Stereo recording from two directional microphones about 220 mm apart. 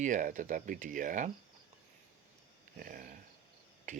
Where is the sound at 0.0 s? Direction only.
35° right (ahead or behind).